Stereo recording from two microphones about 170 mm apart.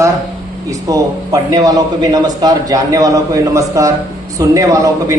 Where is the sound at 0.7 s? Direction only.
20° right (ahead or behind).